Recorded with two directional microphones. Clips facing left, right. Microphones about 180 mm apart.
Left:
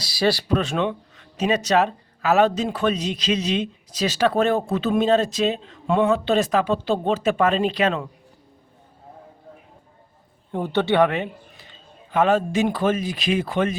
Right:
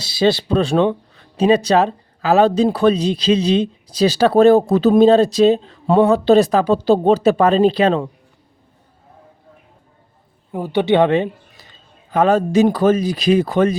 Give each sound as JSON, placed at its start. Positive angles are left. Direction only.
{"t": 0.0, "sound": "speech", "side_deg": -25}
{"t": 10.5, "sound": "speech", "side_deg": -10}